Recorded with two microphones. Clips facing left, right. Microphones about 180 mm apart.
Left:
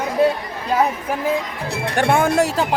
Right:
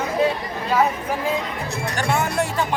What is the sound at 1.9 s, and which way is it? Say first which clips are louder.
Speech: left 7 dB; 55° left (ahead or behind).